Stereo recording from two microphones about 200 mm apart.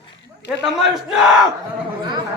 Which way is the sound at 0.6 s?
Centre (ahead or behind).